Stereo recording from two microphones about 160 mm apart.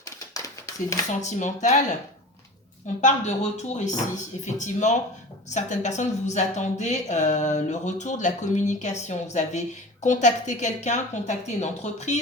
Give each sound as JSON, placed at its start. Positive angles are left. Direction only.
{"t": 0.0, "sound": "a sound", "side_deg": 20}
{"t": 1.2, "sound": "a woman's voice", "side_deg": 50}
{"t": 3.0, "sound": "a woman's voice", "side_deg": 45}